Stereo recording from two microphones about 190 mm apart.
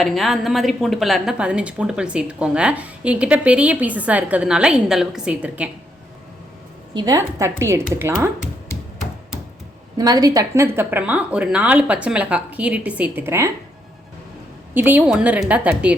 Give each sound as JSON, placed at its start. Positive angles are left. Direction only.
{"t": 0.0, "sound": "a woman's voice", "side_deg": 0}
{"t": 6.9, "sound": "speech", "side_deg": -20}
{"t": 10.0, "sound": "speech", "side_deg": -20}
{"t": 14.7, "sound": "speech", "side_deg": -10}